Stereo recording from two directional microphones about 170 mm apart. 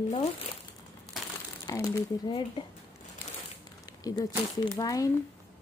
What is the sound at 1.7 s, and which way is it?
Speech, 25° left (ahead or behind).